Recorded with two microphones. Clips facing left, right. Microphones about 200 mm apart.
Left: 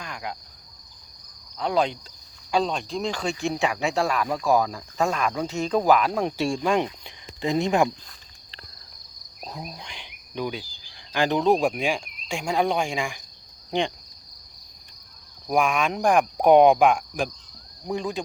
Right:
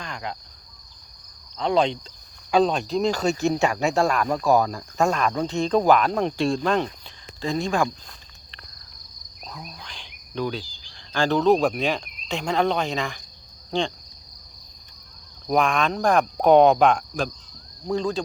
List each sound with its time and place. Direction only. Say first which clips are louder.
0.0 s cricket: right 1 dB; 10° left (ahead or behind)
1.5 s speech: right 2 dB; 5° left (ahead or behind)
2.5 s speech: right 5 dB; 45° right (ahead or behind)
5.1 s speech: right 2 dB; 5° left (ahead or behind)
9.4 s insect: left 3 dB; 30° left (ahead or behind)
9.8 s cricket: left 1 dB; 15° left (ahead or behind)
11.1 s speech: right 2 dB; 15° left (ahead or behind)
15.4 s speech: right 1 dB; 10° left (ahead or behind)